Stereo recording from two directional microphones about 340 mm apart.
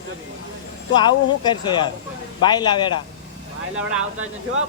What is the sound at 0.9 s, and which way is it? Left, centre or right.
Speech, centre.